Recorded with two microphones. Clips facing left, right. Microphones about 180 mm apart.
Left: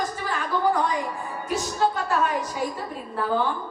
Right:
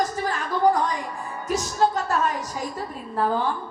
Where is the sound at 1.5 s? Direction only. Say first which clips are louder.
Right 2 dB; 40° right (ahead or behind).